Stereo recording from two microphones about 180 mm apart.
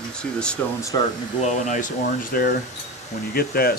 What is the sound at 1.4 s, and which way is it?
Speech, 40° left (ahead or behind).